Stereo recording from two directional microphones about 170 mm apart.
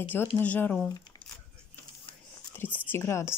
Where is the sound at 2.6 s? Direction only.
10° left (ahead or behind).